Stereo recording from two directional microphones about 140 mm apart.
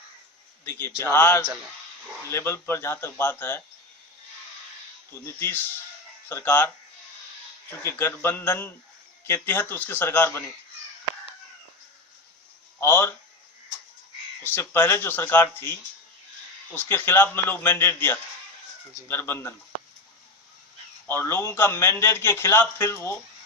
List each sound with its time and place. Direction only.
0.6 s a man's voice: 15° left (ahead or behind)
5.2 s a man's voice: 15° left (ahead or behind)
7.7 s a man's voice: 15° left (ahead or behind)
12.8 s a man's voice: 15° left (ahead or behind)
14.4 s a man's voice: 15° left (ahead or behind)
21.1 s a man's voice: 15° left (ahead or behind)